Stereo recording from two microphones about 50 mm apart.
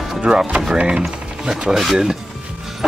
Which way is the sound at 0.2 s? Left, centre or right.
Centre.